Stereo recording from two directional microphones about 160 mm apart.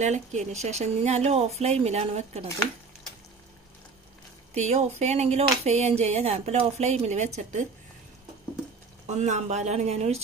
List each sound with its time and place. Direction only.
0.0 s speech: 45° right (ahead or behind)
4.6 s speech: 45° right (ahead or behind)
9.0 s speech: 45° right (ahead or behind)